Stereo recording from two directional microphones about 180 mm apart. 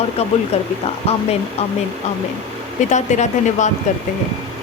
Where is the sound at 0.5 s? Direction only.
35° left (ahead or behind).